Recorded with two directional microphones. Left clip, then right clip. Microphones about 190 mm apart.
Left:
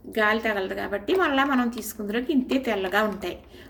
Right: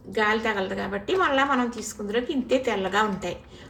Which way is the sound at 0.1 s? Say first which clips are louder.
Left 1 dB; 45° left (ahead or behind).